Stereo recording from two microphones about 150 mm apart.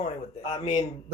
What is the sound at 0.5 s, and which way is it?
Speech, 35° left (ahead or behind).